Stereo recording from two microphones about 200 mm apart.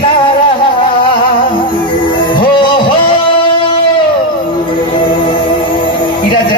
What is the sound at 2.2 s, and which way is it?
Music, 25° left (ahead or behind).